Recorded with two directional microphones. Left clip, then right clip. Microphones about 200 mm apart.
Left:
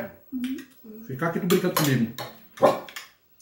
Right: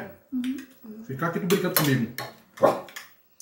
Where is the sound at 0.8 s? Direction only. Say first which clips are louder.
Even; 60° right (ahead or behind).